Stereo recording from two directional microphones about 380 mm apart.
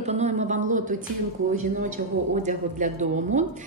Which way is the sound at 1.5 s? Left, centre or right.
Centre.